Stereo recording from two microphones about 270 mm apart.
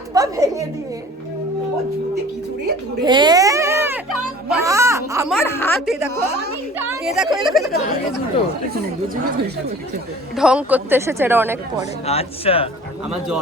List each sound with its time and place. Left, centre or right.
0.1 s a sound: centre
3.0 s a sound: centre
5.3 s music: centre
6.7 s a woman's voice: centre
10.3 s speech: centre
12.0 s speech: left